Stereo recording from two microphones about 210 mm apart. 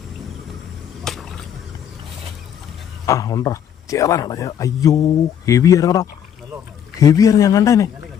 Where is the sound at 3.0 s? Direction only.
15° left (ahead or behind).